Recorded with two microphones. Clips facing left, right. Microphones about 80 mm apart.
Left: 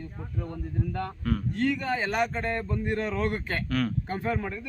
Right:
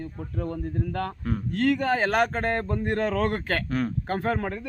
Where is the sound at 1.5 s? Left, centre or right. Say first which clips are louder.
Right 7 dB; right.